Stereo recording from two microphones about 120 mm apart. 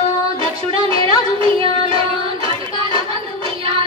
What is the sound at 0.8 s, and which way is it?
Music, 45° right (ahead or behind).